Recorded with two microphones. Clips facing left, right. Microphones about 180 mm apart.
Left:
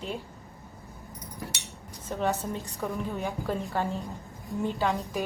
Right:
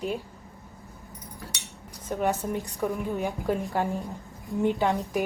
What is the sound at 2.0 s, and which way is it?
A woman's voice, 15° right (ahead or behind).